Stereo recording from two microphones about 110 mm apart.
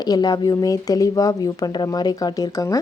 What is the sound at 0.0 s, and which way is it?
Speech, 35° left (ahead or behind).